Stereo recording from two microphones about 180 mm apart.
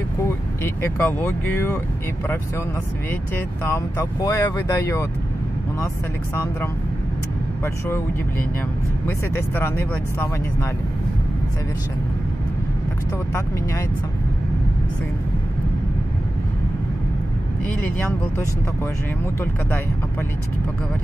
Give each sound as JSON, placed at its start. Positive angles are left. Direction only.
{"t": 0.8, "sound": "speech", "side_deg": 15}
{"t": 3.1, "sound": "speech", "side_deg": 15}
{"t": 6.3, "sound": "speech", "side_deg": 15}